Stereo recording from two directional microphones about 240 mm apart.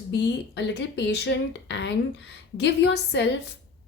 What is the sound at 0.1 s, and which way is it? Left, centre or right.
A woman's voice, left.